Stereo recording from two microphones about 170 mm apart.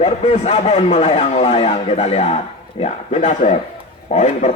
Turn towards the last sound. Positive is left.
turn(degrees=40)  # may be behind; listen again after turning